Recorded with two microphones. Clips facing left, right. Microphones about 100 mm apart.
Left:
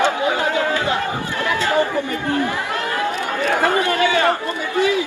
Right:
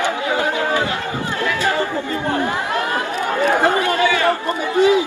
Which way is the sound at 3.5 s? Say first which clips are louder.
Right 1 dB; 20° right (ahead or behind).